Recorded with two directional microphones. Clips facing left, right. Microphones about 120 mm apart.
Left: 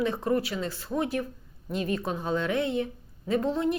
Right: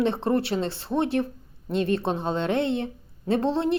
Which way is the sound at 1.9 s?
30° right (ahead or behind).